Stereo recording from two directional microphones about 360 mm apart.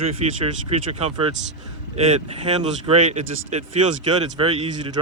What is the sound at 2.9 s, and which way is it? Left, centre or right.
Speech, centre.